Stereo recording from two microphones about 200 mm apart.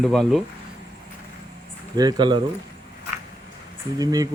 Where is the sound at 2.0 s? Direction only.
20° right (ahead or behind).